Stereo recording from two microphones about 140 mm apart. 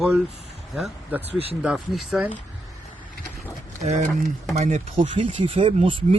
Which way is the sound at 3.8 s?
55° right (ahead or behind).